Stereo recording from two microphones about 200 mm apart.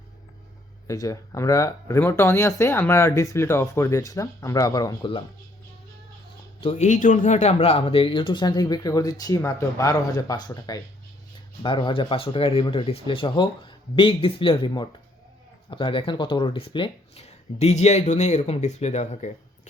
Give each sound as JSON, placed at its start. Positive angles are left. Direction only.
{"t": 0.9, "sound": "speech", "side_deg": 15}
{"t": 6.6, "sound": "speech", "side_deg": 30}